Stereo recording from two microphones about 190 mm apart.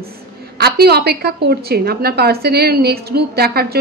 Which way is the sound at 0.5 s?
55° right (ahead or behind).